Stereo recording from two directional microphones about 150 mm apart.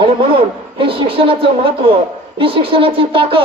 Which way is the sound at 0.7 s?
35° right (ahead or behind).